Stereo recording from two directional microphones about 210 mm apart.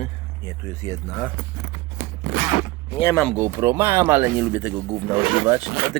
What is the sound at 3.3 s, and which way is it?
Speech, 15° right (ahead or behind).